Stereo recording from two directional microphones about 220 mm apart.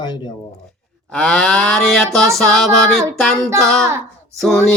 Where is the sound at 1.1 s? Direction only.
5° left (ahead or behind).